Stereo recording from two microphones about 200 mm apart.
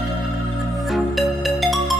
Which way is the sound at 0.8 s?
Centre (ahead or behind).